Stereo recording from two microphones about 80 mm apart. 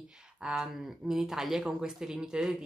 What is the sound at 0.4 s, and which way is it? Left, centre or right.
Speech, centre.